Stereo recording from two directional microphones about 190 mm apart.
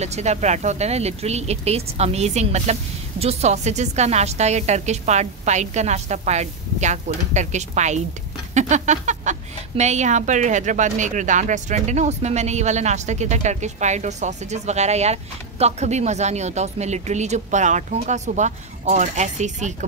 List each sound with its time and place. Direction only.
0.0 s speech: 35° right (ahead or behind)